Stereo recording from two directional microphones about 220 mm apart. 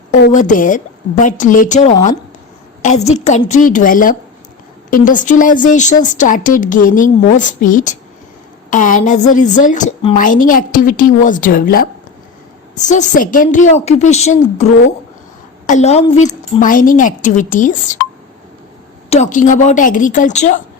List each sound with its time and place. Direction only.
0.3 s speech: 35° left (ahead or behind)
19.1 s speech: 35° left (ahead or behind)